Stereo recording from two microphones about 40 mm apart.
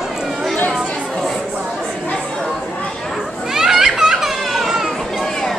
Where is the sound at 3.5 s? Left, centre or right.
Centre.